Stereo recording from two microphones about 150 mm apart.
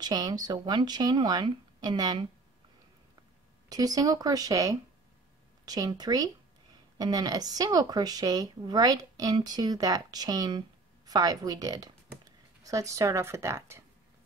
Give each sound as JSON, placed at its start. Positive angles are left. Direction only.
{"t": 0.0, "sound": "speech", "side_deg": -25}
{"t": 3.6, "sound": "speech", "side_deg": -25}